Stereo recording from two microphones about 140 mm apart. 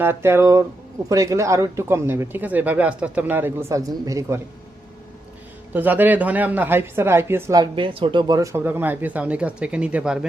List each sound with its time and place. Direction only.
0.0 s speech: 15° right (ahead or behind)
5.7 s speech: 15° right (ahead or behind)
7.6 s speech: 35° right (ahead or behind)
8.4 s speech: 15° right (ahead or behind)